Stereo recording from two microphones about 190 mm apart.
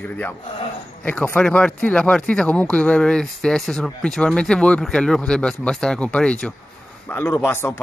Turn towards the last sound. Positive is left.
turn(degrees=15)  # may be behind; listen again after turning